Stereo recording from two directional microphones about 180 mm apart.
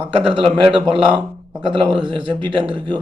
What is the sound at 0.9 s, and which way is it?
Speech, 25° right (ahead or behind).